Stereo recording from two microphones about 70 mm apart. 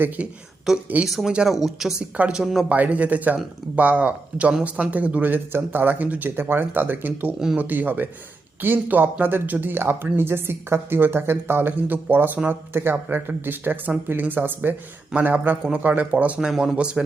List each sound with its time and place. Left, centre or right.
0.2 s speech: centre
0.7 s a woman's voice: centre
1.3 s a woman's voice: centre
2.6 s speech: right
16.5 s a woman's voice: centre